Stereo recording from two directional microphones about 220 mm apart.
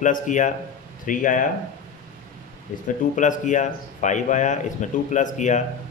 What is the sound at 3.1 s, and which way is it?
Speech, 35° left (ahead or behind).